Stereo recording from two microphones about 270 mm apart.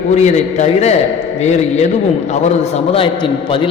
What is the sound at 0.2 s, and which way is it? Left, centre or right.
Speech, left.